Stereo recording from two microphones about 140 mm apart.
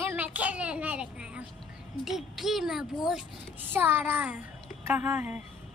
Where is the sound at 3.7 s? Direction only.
15° right (ahead or behind).